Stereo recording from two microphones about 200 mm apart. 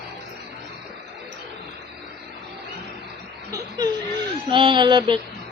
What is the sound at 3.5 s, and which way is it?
A man's voice, 15° right (ahead or behind).